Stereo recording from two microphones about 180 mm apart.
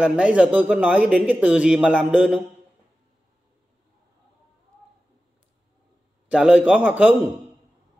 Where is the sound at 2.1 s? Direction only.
5° right (ahead or behind).